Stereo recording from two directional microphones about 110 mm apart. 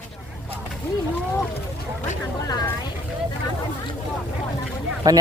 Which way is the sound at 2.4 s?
35° left (ahead or behind).